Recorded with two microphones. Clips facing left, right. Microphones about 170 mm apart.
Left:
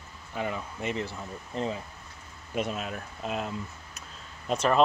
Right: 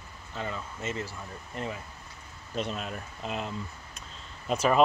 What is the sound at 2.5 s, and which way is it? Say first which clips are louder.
Speech: left 2 dB; 5° left (ahead or behind).